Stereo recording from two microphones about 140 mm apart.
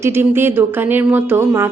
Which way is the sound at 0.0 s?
15° right (ahead or behind).